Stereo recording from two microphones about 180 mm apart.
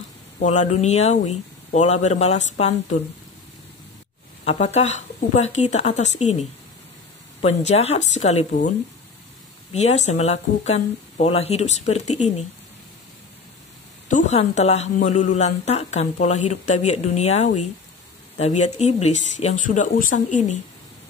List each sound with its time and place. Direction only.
0.4 s speech: 40° left (ahead or behind)
4.5 s speech: 35° left (ahead or behind)
7.4 s speech: 35° left (ahead or behind)
14.0 s speech: 40° left (ahead or behind)